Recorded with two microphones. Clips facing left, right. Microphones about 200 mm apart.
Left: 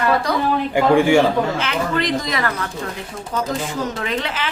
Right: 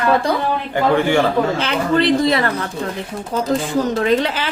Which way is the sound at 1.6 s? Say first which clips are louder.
Right 5 dB; 30° right (ahead or behind).